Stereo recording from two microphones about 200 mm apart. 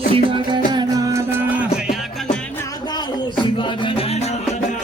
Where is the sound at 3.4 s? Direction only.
25° left (ahead or behind).